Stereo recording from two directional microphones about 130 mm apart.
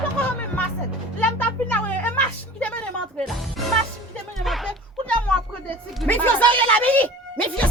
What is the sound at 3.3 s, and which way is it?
Music, centre (ahead or behind).